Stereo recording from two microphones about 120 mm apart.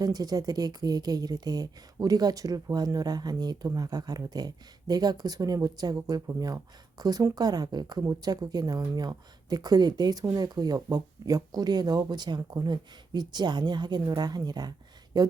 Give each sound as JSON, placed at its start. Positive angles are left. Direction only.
{"t": 0.0, "sound": "speech", "side_deg": -30}